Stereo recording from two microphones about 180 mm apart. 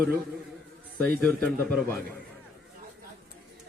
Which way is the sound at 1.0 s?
5° left (ahead or behind).